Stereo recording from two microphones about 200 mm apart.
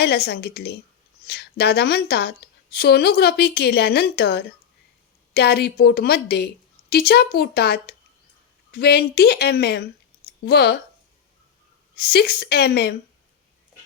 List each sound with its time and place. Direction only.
0.0 s a woman's voice: 55° left (ahead or behind)
11.9 s a woman's voice: 50° left (ahead or behind)